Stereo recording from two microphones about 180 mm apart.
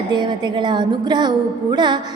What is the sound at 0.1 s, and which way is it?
A woman's voice, 25° right (ahead or behind).